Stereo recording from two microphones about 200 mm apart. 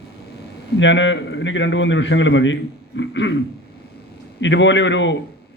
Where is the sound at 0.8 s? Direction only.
65° left (ahead or behind).